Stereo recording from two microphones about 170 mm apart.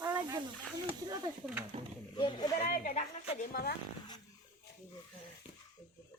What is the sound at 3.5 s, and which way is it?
Speech, 60° left (ahead or behind).